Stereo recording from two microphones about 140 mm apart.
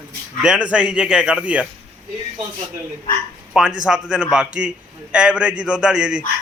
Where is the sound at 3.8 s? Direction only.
5° right (ahead or behind).